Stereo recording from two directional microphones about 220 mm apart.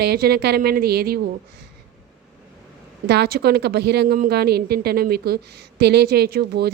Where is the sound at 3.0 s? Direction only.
45° right (ahead or behind).